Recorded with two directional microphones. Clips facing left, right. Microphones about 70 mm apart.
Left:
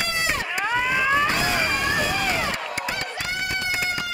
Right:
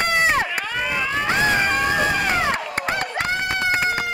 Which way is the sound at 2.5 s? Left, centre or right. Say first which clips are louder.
Right 4 dB; right.